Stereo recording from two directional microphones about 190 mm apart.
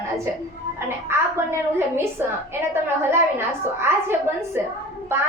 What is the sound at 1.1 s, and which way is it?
A woman's voice, 15° right (ahead or behind).